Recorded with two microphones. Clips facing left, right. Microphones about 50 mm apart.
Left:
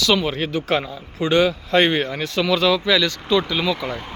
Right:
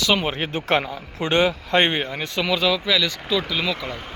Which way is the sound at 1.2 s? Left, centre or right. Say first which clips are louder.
Left 2 dB; right.